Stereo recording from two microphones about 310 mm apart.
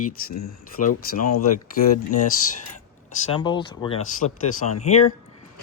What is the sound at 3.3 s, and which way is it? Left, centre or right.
Speech, centre.